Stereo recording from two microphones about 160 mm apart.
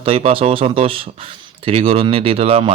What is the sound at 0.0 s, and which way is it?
Speech, 40° right (ahead or behind).